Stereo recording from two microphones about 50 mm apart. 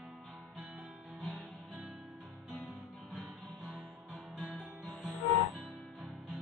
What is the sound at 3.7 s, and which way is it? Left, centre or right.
Music, centre.